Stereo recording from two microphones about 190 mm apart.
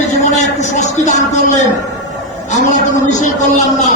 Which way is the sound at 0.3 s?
40° left (ahead or behind).